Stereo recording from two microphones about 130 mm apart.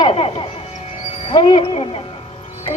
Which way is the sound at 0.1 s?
50° left (ahead or behind).